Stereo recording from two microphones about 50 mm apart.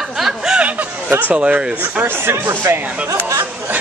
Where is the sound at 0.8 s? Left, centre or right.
Right.